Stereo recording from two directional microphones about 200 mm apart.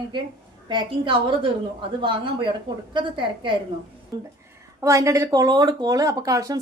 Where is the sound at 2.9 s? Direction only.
25° right (ahead or behind).